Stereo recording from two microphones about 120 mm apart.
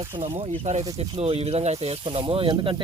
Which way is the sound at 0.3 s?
60° right (ahead or behind).